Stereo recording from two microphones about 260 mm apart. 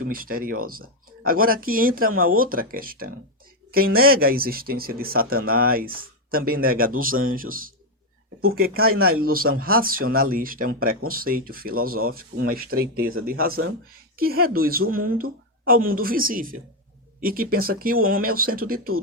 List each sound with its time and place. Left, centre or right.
0.0 s speech: right
14.2 s speech: right